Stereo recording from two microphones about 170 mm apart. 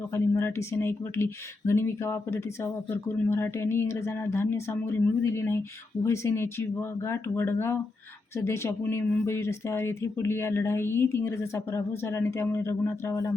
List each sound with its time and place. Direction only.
0.1 s speech: 15° left (ahead or behind)